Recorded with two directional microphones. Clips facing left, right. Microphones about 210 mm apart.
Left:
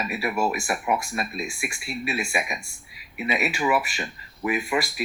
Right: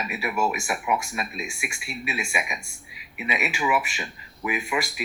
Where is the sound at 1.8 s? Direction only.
40° left (ahead or behind).